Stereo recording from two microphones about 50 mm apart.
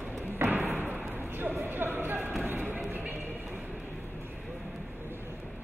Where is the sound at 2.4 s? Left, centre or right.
Right.